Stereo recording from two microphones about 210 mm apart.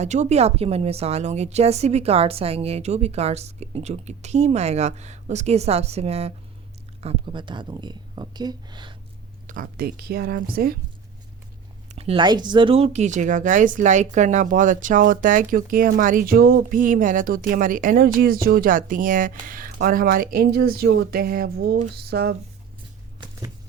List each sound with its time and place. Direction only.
0.0 s speech: 35° right (ahead or behind)
9.5 s a woman's voice: 45° right (ahead or behind)
11.9 s a woman's voice: 25° right (ahead or behind); by 22.4 s 50° right (ahead or behind)